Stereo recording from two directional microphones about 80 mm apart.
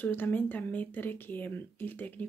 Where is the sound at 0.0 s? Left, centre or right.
Left.